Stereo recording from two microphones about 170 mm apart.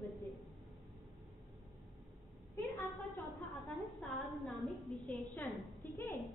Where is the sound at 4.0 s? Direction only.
Centre (ahead or behind).